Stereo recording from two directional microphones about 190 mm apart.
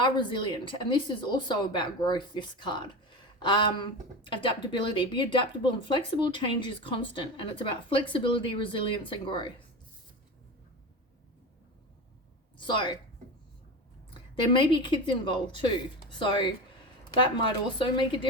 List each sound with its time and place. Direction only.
0.0 s speech: 25° left (ahead or behind)
12.5 s a woman's voice: 25° left (ahead or behind)
14.1 s speech: 25° left (ahead or behind)
17.7 s speech: 25° left (ahead or behind)